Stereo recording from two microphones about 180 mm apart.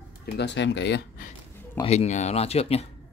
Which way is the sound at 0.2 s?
70° left (ahead or behind).